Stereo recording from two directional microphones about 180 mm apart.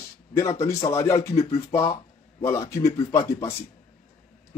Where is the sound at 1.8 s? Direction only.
30° left (ahead or behind).